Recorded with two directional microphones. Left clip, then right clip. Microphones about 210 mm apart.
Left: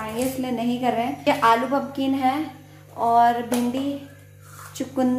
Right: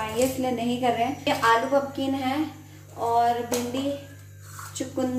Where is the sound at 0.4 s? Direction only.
25° left (ahead or behind).